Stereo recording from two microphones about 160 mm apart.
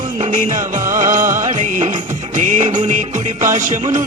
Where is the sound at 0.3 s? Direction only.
55° right (ahead or behind).